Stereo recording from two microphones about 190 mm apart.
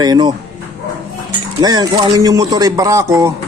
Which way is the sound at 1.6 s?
20° right (ahead or behind).